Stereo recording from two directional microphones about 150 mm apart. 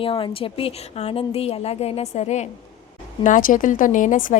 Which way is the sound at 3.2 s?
60° left (ahead or behind).